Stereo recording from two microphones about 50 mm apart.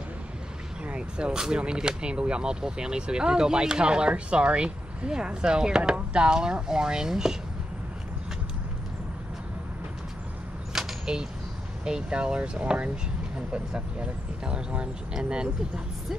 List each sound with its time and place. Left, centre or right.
0.8 s speech: right
10.7 s a sound: centre
11.8 s speech: centre